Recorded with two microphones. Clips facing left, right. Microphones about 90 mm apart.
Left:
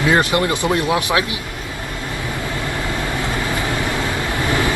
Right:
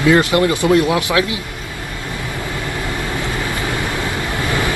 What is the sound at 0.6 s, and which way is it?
Speech, 25° left (ahead or behind).